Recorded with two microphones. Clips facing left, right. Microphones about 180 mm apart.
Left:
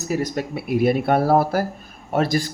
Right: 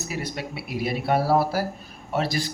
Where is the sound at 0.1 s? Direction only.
45° left (ahead or behind).